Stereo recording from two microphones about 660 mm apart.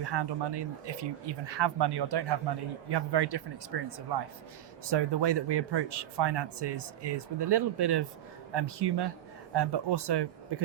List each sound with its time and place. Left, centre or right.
0.0 s speech: right